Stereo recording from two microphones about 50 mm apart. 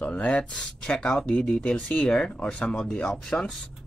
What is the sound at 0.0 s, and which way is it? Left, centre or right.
Speech, left.